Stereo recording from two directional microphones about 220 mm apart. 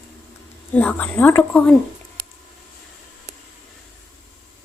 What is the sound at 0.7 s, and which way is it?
Speech, 10° left (ahead or behind).